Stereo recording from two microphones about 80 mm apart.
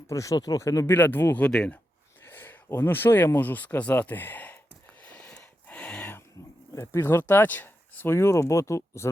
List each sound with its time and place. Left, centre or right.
0.1 s speech: left
0.9 s speech: left
1.5 s speech: centre
2.2 s speech: left
5.0 s a sound: centre
6.7 s speech: left